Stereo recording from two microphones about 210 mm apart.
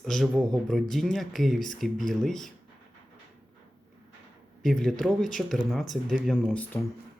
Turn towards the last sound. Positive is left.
turn(degrees=5)  # may be behind; listen again after turning